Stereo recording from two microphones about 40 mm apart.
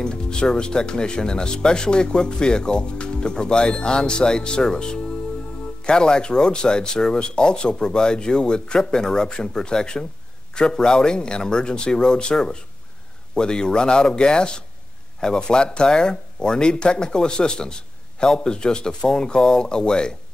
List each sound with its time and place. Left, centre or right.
0.0 s speech: left